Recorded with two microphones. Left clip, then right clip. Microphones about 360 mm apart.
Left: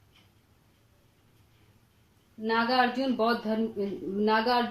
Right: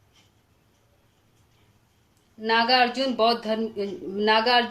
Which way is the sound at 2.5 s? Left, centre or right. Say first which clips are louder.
Right 5 dB; right.